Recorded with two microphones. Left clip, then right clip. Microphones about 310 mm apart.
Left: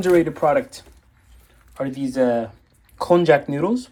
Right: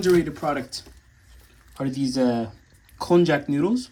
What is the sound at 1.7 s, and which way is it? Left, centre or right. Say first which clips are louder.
Speech: left 3 dB; centre.